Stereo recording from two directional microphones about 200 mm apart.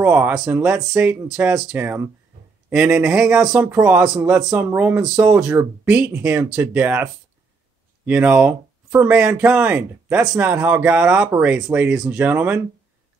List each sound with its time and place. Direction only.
0.0 s speech: 10° right (ahead or behind)